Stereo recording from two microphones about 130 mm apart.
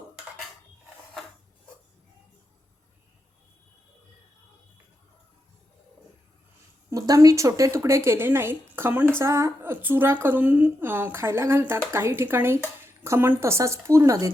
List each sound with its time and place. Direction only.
6.9 s speech: 25° right (ahead or behind)